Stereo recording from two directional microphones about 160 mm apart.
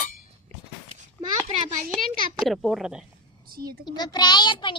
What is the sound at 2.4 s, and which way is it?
Speech, centre (ahead or behind).